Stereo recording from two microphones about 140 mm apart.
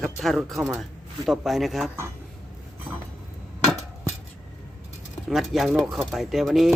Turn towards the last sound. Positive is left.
turn(degrees=0)  # may be behind; listen again after turning